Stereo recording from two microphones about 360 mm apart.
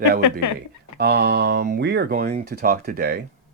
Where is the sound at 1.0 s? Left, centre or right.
Right.